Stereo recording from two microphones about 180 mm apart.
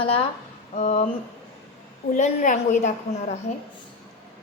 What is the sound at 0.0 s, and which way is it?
A woman's voice, 30° left (ahead or behind).